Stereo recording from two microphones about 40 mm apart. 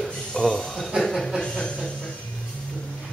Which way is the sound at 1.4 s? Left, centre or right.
Left.